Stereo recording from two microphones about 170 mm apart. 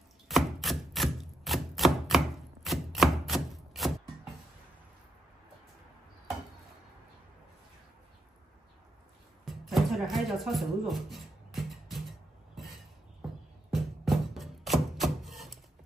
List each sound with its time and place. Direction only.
0.3 s chopping: centre (ahead or behind)
9.4 s music: centre (ahead or behind)
13.7 s music: centre (ahead or behind)